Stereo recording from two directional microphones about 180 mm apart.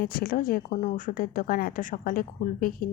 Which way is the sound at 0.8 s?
45° left (ahead or behind).